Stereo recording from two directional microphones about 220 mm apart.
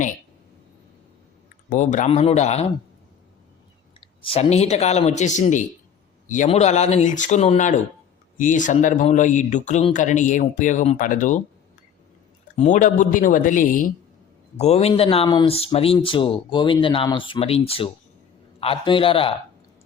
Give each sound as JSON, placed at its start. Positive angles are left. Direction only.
{"t": 1.7, "sound": "speech", "side_deg": 35}
{"t": 4.0, "sound": "speech", "side_deg": 25}
{"t": 12.5, "sound": "speech", "side_deg": 35}